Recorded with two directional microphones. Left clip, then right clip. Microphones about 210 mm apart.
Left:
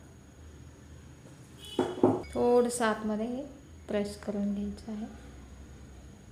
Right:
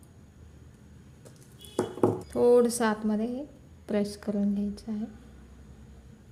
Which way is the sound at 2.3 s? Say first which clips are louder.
Right 5 dB; 35° right (ahead or behind).